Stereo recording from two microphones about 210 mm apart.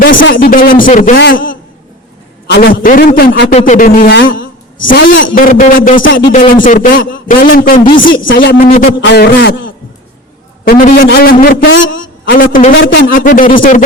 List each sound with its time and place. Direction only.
0.0 s speech: 65° left (ahead or behind)
0.4 s a man's voice: 40° left (ahead or behind)
3.5 s a man's voice: 35° left (ahead or behind)
4.2 s speech: 65° left (ahead or behind)
4.8 s a man's voice: 40° left (ahead or behind)
9.0 s a man's voice: 55° left (ahead or behind)
10.7 s a man's voice: 45° left (ahead or behind)
11.6 s a man's voice: 65° left (ahead or behind)
12.4 s a man's voice: 40° left (ahead or behind)